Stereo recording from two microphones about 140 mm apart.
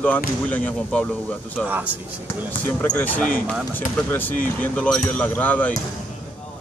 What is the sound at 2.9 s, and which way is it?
Speech, 10° left (ahead or behind).